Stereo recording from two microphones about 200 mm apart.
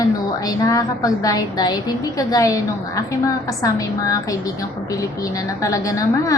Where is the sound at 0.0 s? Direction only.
20° left (ahead or behind).